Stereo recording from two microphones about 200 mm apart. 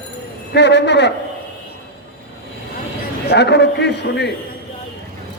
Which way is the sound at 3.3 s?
60° left (ahead or behind).